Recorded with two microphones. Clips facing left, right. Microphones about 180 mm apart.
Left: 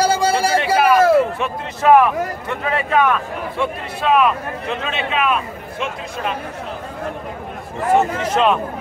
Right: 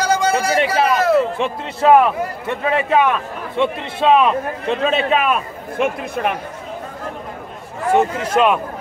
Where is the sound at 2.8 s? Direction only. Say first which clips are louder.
Left 2 dB; 20° right (ahead or behind); by 6.4 s 60° right (ahead or behind).